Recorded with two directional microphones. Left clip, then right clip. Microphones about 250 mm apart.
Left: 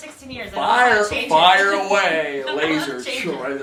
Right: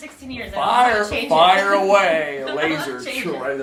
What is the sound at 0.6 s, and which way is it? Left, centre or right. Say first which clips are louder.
Speech: left 1 dB; centre.